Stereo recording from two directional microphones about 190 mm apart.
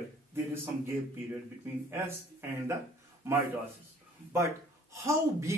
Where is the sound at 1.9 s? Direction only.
10° right (ahead or behind).